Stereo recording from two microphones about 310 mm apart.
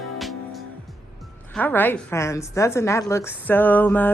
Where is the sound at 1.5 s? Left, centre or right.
Centre.